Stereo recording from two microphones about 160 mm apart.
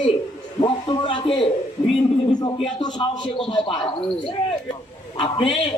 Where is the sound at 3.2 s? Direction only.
35° left (ahead or behind).